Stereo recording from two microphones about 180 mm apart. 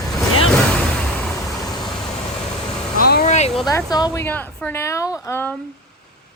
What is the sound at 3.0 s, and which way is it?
Vehicle, 55° left (ahead or behind).